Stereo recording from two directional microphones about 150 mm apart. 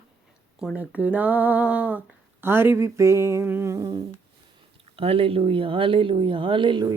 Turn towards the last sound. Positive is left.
turn(degrees=-30)  # may be behind; listen again after turning